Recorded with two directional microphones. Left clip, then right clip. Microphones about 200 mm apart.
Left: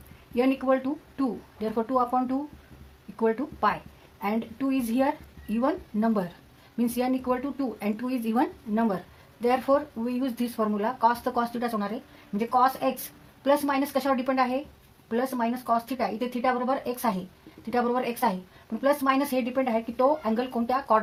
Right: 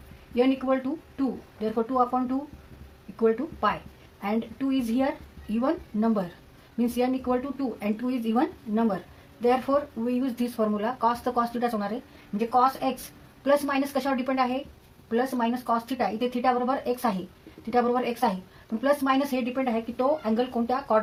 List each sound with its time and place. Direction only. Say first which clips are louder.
0.3 s a woman's voice: even; 40° left (ahead or behind)